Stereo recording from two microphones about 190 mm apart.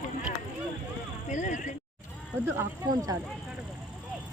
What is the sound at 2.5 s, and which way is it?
Speech, 20° right (ahead or behind).